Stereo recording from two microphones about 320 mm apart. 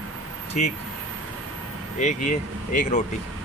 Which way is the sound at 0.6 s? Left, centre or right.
Left.